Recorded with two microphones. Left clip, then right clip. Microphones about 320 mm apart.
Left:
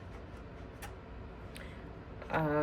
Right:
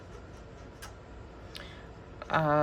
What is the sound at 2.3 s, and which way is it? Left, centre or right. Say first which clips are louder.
Speech: right 6 dB; centre.